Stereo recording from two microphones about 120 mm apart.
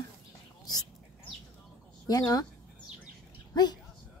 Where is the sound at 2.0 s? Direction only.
30° left (ahead or behind).